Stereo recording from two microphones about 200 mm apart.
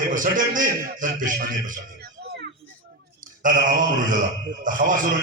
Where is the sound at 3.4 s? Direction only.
40° right (ahead or behind).